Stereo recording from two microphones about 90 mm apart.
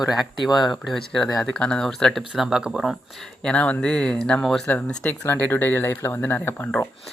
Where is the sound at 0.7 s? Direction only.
Centre (ahead or behind).